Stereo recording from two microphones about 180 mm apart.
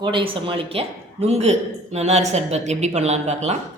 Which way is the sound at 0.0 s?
30° right (ahead or behind).